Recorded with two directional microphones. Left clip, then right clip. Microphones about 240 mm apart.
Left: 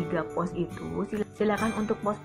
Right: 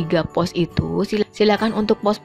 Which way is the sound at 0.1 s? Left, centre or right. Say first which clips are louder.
Right 12 dB; right.